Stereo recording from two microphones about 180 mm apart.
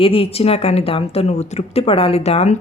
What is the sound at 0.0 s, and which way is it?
A woman's voice, 30° left (ahead or behind).